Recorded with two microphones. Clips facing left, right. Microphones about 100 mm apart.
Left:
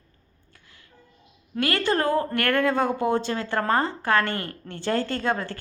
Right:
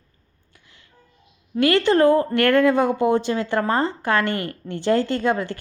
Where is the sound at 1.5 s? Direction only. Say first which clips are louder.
Right 7 dB; 20° right (ahead or behind).